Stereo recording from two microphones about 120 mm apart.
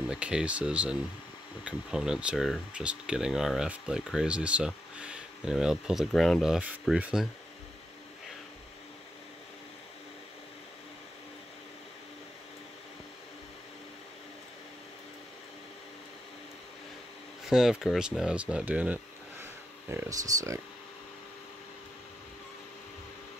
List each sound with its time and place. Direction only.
0.0 s speech: 10° right (ahead or behind)
17.5 s speech: 5° right (ahead or behind); by 20.6 s 25° right (ahead or behind)